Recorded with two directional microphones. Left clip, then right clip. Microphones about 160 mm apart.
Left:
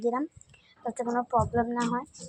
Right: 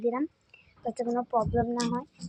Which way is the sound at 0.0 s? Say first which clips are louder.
Even; 10° right (ahead or behind).